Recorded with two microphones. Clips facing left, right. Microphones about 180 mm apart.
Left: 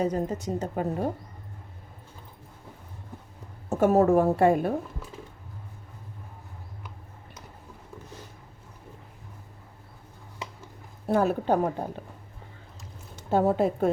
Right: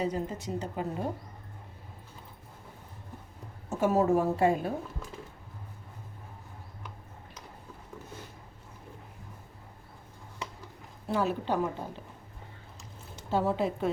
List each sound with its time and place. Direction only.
0.0 s a woman's voice: 45° left (ahead or behind)
3.7 s a woman's voice: 55° left (ahead or behind)
11.1 s a woman's voice: 50° left (ahead or behind)
13.3 s a woman's voice: 50° left (ahead or behind)